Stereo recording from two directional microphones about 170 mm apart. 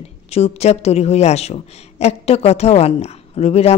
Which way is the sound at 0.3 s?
40° left (ahead or behind).